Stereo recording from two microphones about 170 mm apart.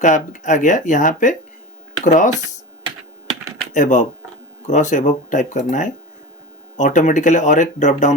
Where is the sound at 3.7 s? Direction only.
45° left (ahead or behind).